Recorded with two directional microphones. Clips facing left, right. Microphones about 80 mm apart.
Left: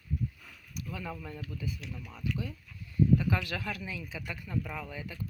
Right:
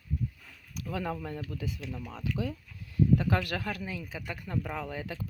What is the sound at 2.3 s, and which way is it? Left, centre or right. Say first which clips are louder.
Speech: right 5 dB; right.